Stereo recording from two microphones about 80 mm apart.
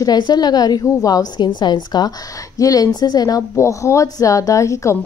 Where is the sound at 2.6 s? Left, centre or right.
Left.